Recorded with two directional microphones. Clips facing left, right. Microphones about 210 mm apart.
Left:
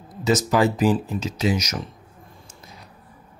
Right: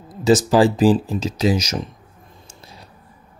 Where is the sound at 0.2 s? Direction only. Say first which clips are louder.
Right 5 dB; 30° right (ahead or behind).